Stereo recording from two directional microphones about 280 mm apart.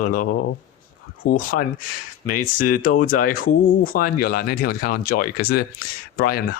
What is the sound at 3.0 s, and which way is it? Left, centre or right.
Speech, left.